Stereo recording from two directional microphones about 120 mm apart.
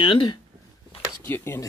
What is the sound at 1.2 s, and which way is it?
Speech, 20° left (ahead or behind).